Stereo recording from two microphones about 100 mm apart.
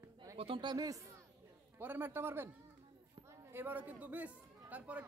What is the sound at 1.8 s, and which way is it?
A man's voice, 20° right (ahead or behind).